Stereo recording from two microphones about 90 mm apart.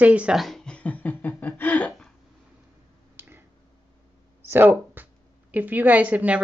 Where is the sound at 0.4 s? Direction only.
5° left (ahead or behind); by 1.9 s 20° left (ahead or behind).